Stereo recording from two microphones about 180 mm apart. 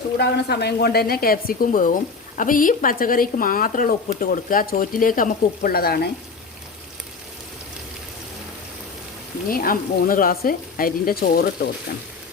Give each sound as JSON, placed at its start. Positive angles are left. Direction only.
{"t": 0.2, "sound": "a woman's voice", "side_deg": 65}
{"t": 9.5, "sound": "speech", "side_deg": 55}